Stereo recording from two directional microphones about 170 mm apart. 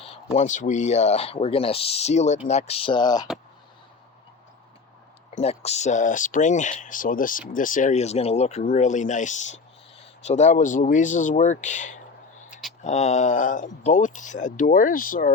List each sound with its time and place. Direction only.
0.3 s speech: 45° left (ahead or behind); by 3.2 s 25° left (ahead or behind)
5.4 s speech: 40° left (ahead or behind); by 15.3 s 55° left (ahead or behind)